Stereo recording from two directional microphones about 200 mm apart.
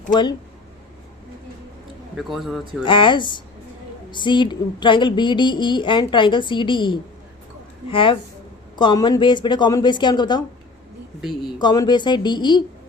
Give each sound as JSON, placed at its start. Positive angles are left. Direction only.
{"t": 0.1, "sound": "a woman's voice", "side_deg": 20}
{"t": 2.1, "sound": "a man's voice", "side_deg": 0}
{"t": 2.8, "sound": "a woman's voice", "side_deg": 25}
{"t": 11.6, "sound": "a woman's voice", "side_deg": 20}